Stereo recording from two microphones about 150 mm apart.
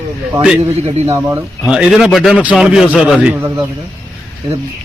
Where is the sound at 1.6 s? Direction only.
5° right (ahead or behind).